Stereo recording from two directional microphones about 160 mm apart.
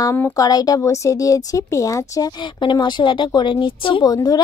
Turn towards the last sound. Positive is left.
turn(degrees=25)  # may be behind; listen again after turning